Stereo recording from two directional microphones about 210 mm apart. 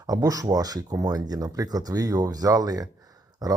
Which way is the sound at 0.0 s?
15° right (ahead or behind).